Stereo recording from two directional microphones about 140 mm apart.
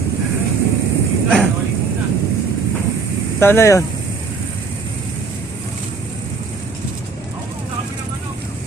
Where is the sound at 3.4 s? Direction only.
20° left (ahead or behind).